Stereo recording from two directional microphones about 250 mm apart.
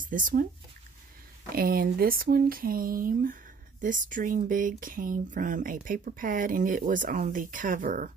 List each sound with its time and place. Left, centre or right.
0.0 s speech: right
1.5 s speech: right